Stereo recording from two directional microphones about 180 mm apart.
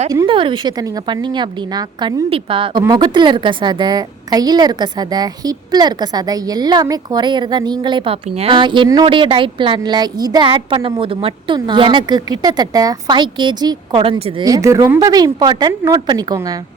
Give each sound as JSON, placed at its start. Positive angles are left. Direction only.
{"t": 0.3, "sound": "a woman's voice", "side_deg": -30}